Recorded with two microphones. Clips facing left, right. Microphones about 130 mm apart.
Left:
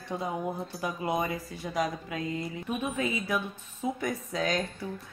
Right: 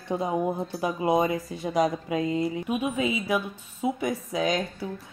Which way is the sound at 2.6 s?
10° right (ahead or behind).